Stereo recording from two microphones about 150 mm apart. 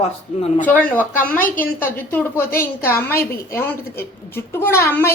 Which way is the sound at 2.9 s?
15° left (ahead or behind).